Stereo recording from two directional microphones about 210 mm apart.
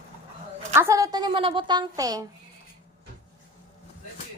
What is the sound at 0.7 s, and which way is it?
Speech, 15° right (ahead or behind).